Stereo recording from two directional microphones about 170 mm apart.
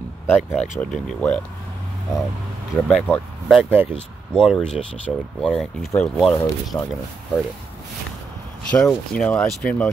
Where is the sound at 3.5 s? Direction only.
10° right (ahead or behind).